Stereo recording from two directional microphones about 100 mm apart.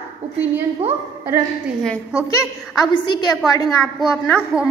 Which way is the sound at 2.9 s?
50° left (ahead or behind).